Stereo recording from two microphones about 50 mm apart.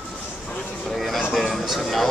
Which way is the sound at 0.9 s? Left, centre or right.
Centre.